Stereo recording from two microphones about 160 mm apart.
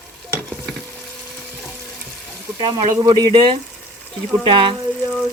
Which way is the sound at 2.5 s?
25° right (ahead or behind).